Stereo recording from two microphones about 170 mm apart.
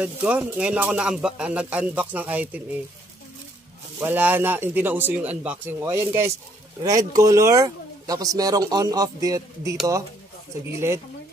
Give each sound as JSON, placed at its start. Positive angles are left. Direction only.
{"t": 0.0, "sound": "speech", "side_deg": -10}
{"t": 4.0, "sound": "speech", "side_deg": -10}